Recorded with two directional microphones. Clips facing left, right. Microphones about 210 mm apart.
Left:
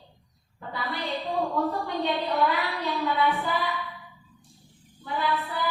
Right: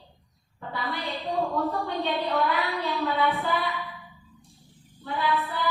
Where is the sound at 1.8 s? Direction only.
15° left (ahead or behind).